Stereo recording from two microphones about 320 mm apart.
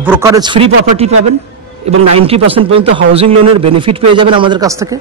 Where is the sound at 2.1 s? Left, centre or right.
Centre.